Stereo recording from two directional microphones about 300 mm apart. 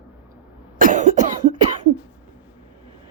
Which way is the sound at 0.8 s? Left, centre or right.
Right.